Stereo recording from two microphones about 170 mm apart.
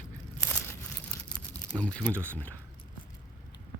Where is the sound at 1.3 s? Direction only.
5° left (ahead or behind).